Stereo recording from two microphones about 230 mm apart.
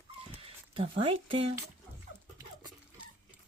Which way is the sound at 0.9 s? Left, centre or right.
Right.